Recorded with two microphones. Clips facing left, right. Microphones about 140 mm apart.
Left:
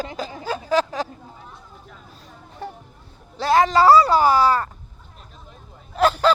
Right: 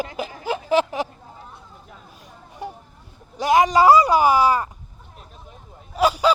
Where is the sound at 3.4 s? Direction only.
15° right (ahead or behind).